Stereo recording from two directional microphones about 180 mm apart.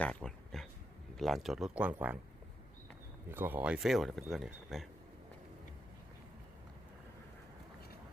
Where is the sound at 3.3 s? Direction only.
10° right (ahead or behind).